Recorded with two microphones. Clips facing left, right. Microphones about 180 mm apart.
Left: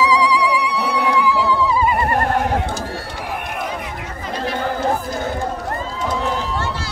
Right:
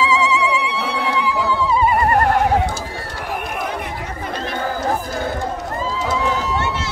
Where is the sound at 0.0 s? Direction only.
25° right (ahead or behind).